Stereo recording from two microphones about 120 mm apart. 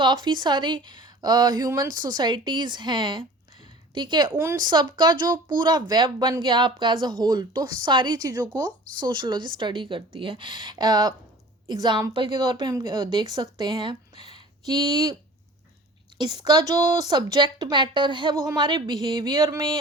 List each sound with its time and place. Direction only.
0.0 s a woman's voice: 40° right (ahead or behind)
4.3 s a woman's voice: 20° right (ahead or behind)
4.6 s a woman's voice: 35° right (ahead or behind)
16.2 s a woman's voice: 35° right (ahead or behind)